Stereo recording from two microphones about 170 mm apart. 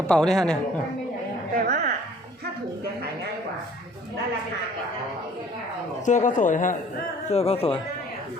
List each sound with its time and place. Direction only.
0.1 s a man's voice: 5° left (ahead or behind)
1.6 s a sound: 60° right (ahead or behind)
6.1 s speech: 45° left (ahead or behind)
7.3 s speech: 35° left (ahead or behind)